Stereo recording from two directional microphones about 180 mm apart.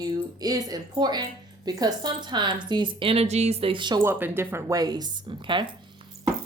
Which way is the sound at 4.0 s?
10° right (ahead or behind).